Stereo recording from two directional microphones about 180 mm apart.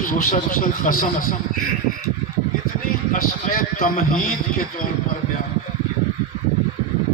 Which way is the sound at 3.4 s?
55° left (ahead or behind).